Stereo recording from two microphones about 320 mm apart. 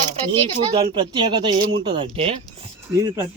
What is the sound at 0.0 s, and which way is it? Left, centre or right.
Speech, right.